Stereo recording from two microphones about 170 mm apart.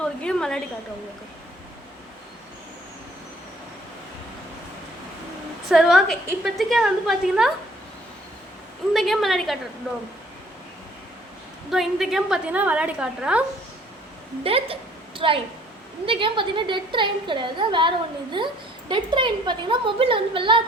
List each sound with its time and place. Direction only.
0.0 s a woman's voice: 5° left (ahead or behind)
5.6 s a woman's voice: centre (ahead or behind)
8.9 s a woman's voice: centre (ahead or behind)
11.7 s a woman's voice: centre (ahead or behind)
14.4 s a woman's voice: 35° right (ahead or behind)